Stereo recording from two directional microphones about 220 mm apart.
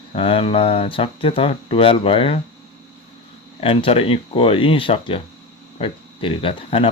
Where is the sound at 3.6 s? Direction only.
25° left (ahead or behind).